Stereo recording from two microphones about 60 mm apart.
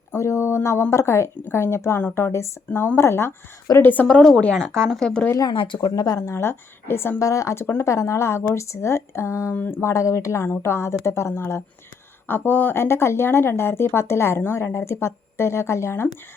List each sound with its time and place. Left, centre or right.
0.2 s speech: left
3.8 s speech: left
4.0 s speech: centre
5.9 s speech: left
6.3 s speech: left
7.2 s speech: left
9.6 s speech: left
9.8 s speech: left
10.4 s speech: left
12.3 s speech: left
12.7 s speech: left